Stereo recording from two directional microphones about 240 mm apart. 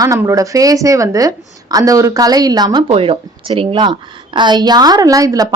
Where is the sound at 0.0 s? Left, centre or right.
Centre.